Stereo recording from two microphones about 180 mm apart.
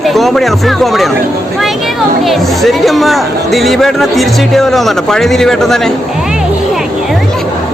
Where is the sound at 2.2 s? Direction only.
Centre (ahead or behind).